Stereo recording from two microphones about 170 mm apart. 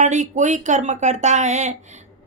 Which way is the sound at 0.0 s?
45° right (ahead or behind).